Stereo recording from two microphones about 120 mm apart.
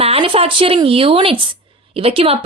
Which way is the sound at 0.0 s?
50° right (ahead or behind).